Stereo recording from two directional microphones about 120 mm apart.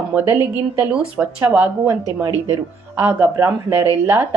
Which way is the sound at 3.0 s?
15° right (ahead or behind).